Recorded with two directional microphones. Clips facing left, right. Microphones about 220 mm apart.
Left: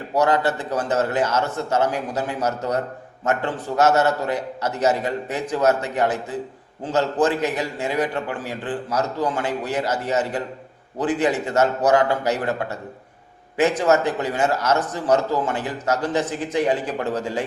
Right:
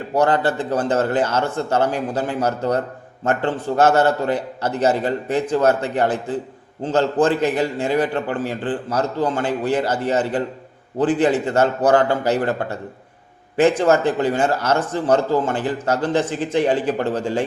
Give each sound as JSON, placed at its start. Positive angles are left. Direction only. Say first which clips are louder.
{"t": 0.1, "sound": "a man's voice", "louder": "right 2 dB", "side_deg": -30}